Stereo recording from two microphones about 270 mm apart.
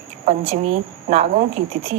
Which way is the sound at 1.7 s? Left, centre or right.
Right.